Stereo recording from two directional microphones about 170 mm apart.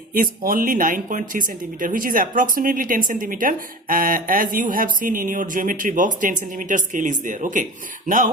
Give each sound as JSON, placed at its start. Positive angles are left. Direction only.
{"t": 0.1, "sound": "speech", "side_deg": -60}